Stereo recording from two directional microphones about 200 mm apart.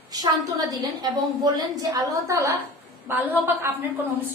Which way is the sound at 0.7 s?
20° right (ahead or behind).